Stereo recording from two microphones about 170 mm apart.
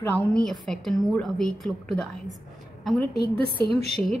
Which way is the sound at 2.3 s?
Centre (ahead or behind).